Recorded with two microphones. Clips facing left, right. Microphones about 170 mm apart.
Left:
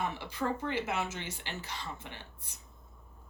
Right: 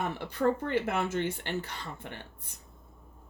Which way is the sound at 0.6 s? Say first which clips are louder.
Right 4 dB; 55° right (ahead or behind).